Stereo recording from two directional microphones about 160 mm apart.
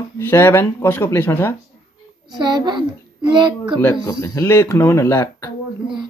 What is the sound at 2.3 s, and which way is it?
A child's voice, 30° right (ahead or behind).